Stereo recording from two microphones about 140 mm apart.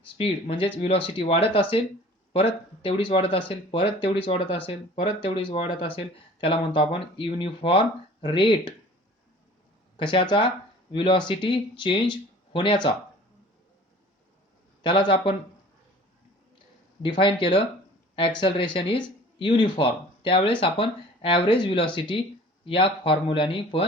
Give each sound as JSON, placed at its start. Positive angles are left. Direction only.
{"t": 0.0, "sound": "speech", "side_deg": 40}
{"t": 10.0, "sound": "speech", "side_deg": 35}
{"t": 14.8, "sound": "speech", "side_deg": 35}
{"t": 17.0, "sound": "speech", "side_deg": 35}